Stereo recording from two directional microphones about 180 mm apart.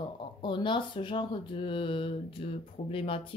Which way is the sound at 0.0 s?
25° left (ahead or behind).